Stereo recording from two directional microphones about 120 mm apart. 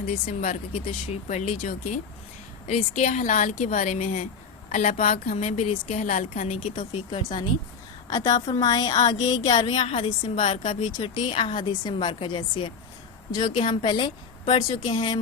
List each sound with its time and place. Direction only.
0.3 s speech: 90° left
0.7 s speech: 55° left (ahead or behind); by 2.0 s 80° left
2.6 s a woman's voice: 90° left
6.7 s a woman's voice: 40° left (ahead or behind)
9.7 s speech: 60° left (ahead or behind)
10.5 s a woman's voice: 75° left (ahead or behind)
10.9 s a woman's voice: 35° left (ahead or behind)
11.3 s a woman's voice: 50° left (ahead or behind)